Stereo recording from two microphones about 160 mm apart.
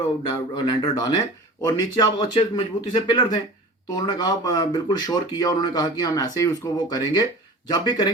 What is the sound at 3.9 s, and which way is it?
Speech, 25° left (ahead or behind).